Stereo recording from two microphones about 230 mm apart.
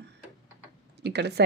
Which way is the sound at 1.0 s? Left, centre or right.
Right.